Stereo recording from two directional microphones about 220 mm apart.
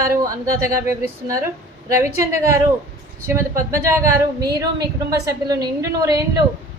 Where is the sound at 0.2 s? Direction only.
15° right (ahead or behind).